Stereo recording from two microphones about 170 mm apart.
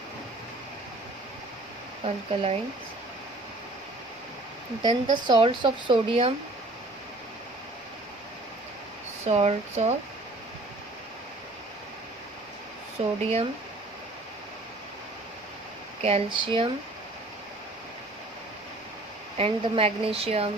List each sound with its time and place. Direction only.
2.0 s a woman's voice: 35° right (ahead or behind)
4.8 s speech: 25° right (ahead or behind)
9.2 s a woman's voice: 40° right (ahead or behind)
13.0 s a woman's voice: 35° right (ahead or behind)
16.0 s a woman's voice: 30° right (ahead or behind)
19.4 s a woman's voice: 35° right (ahead or behind)